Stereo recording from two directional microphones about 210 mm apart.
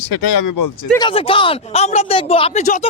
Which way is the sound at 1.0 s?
25° left (ahead or behind).